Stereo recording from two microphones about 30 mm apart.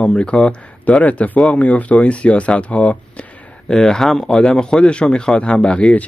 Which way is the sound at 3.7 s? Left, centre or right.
Centre.